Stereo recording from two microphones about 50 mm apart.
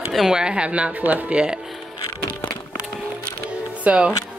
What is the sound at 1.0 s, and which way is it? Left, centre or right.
Speech, right.